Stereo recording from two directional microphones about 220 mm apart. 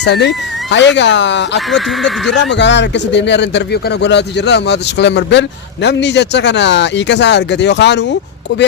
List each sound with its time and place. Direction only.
0.0 s speech: 50° left (ahead or behind)
1.5 s speech: centre (ahead or behind)
2.3 s speech: 55° left (ahead or behind)